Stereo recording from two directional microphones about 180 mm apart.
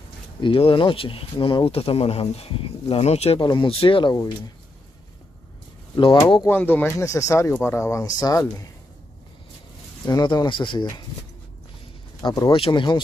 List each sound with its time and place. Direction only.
0.4 s speech: 30° left (ahead or behind)
5.9 s speech: 30° left (ahead or behind)
6.4 s speech: 10° left (ahead or behind)
10.0 s speech: 25° left (ahead or behind)
12.2 s speech: 20° left (ahead or behind)